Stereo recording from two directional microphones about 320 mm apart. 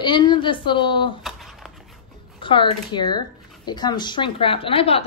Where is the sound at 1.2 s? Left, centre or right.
Centre.